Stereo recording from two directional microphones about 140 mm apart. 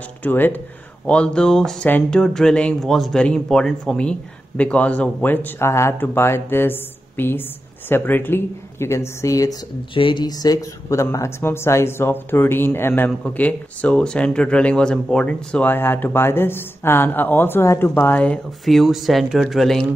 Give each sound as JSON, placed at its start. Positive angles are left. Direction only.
{"t": 0.2, "sound": "speech", "side_deg": 15}
{"t": 9.9, "sound": "speech", "side_deg": 35}